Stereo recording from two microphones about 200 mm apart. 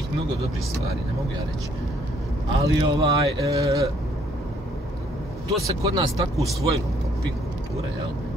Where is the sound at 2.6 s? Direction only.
25° right (ahead or behind).